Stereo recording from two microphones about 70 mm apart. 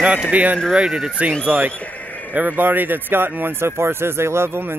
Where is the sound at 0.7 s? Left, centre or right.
Centre.